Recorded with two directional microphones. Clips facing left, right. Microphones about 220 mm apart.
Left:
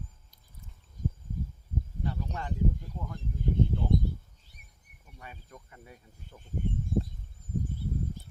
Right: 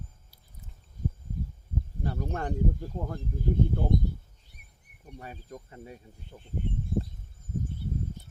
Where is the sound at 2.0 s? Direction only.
45° right (ahead or behind).